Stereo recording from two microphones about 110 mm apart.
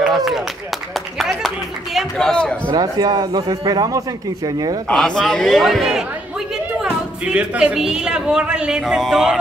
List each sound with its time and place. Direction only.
0.0 s a sound: centre (ahead or behind)
2.0 s speech: 5° left (ahead or behind)
2.7 s speech: 35° right (ahead or behind)
4.8 s a man's voice: 5° left (ahead or behind)